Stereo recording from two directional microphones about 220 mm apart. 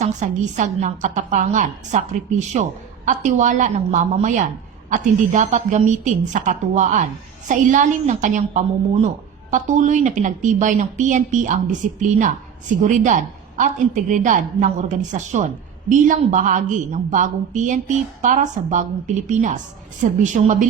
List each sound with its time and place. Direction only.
0.0 s a woman's voice: 35° right (ahead or behind)